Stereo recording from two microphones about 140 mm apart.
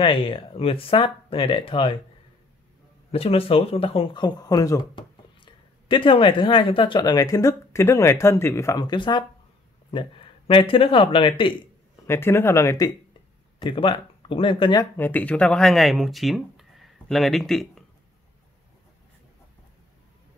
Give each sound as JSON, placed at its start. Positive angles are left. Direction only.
{"t": 0.0, "sound": "speech", "side_deg": 40}
{"t": 3.1, "sound": "speech", "side_deg": 45}
{"t": 12.1, "sound": "speech", "side_deg": 15}
{"t": 13.7, "sound": "speech", "side_deg": 35}
{"t": 14.8, "sound": "speech", "side_deg": 15}